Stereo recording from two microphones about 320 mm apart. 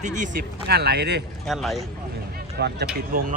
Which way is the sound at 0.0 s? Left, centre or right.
Right.